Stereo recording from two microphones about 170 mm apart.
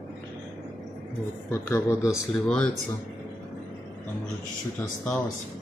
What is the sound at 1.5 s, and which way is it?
Speech, 20° left (ahead or behind).